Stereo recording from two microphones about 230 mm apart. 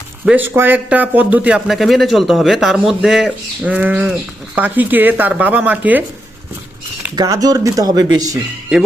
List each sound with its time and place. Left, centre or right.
0.3 s a man's voice: centre
7.2 s speech: centre